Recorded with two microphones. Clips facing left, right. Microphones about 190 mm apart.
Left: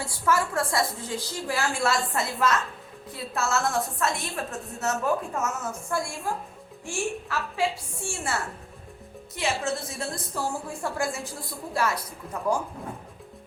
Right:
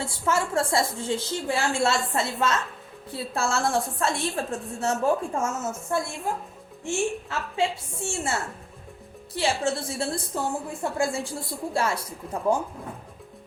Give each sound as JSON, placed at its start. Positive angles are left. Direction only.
{"t": 0.0, "sound": "a woman's voice", "side_deg": -25}